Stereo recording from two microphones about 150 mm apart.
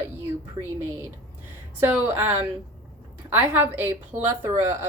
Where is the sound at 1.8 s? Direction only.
10° right (ahead or behind).